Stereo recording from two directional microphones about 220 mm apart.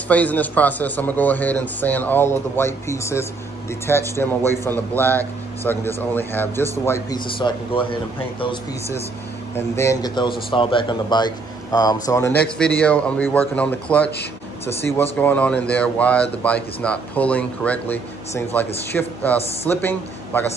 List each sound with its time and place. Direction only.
0.1 s speech: 5° left (ahead or behind); by 8.5 s 25° left (ahead or behind)
9.6 s speech: 10° left (ahead or behind)
19.3 s speech: 30° left (ahead or behind)
19.7 s speech: 10° left (ahead or behind)